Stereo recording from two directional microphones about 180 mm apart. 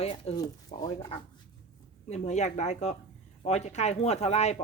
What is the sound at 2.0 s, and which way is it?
Speech, 40° left (ahead or behind).